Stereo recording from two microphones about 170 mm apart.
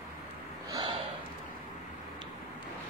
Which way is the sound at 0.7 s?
25° right (ahead or behind).